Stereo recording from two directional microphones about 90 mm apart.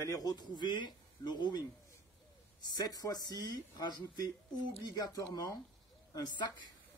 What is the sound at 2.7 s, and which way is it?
Speech, 45° left (ahead or behind).